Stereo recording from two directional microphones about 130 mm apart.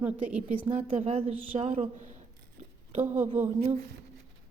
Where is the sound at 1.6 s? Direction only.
65° right (ahead or behind).